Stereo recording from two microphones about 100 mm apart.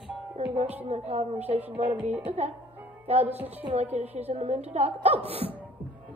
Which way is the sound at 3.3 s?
85° right.